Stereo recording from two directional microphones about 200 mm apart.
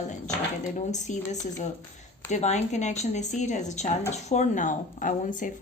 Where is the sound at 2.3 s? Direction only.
35° left (ahead or behind).